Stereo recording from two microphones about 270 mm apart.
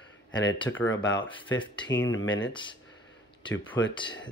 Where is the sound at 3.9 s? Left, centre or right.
Centre.